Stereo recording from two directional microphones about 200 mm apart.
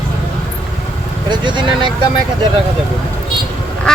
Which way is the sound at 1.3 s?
25° right (ahead or behind).